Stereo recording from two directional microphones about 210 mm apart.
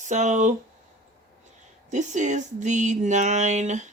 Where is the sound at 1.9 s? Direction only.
35° right (ahead or behind).